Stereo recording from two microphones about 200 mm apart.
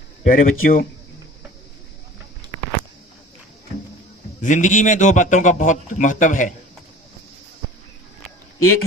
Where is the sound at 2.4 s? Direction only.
20° right (ahead or behind).